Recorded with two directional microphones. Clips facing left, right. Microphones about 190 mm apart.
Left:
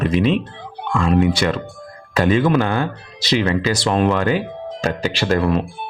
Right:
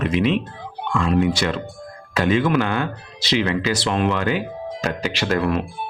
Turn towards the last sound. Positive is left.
turn(degrees=30)  # may be behind; listen again after turning